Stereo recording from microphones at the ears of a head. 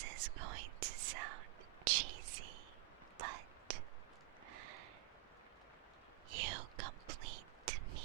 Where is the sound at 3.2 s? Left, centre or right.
Right.